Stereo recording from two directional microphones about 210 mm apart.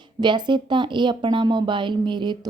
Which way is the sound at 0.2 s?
20° right (ahead or behind).